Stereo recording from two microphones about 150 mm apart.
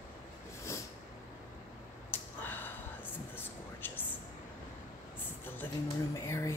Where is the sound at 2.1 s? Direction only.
15° left (ahead or behind).